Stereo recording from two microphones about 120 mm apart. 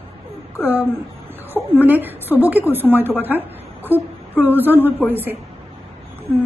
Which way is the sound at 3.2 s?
15° right (ahead or behind).